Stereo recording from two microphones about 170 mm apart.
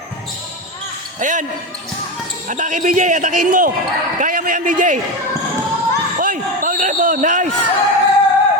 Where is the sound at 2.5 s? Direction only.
50° right (ahead or behind).